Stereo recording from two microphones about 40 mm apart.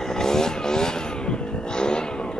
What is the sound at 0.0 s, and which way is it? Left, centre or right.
Vehicle, centre.